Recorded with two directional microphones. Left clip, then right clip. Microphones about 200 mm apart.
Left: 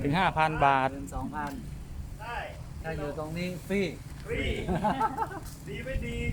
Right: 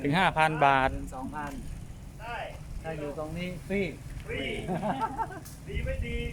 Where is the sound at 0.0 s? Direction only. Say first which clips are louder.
Right 1 dB; 15° right (ahead or behind).